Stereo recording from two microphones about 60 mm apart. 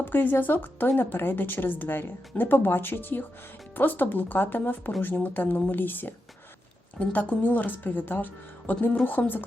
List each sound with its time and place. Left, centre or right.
0.0 s a woman's voice: left